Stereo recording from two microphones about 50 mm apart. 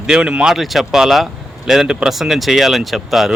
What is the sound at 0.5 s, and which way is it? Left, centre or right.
Speech, centre.